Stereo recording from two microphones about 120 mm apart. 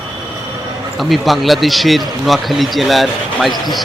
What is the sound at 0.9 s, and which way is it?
Speech, centre (ahead or behind).